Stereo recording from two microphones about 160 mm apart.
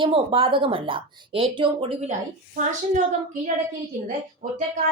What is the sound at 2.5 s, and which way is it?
Speech, 50° right (ahead or behind).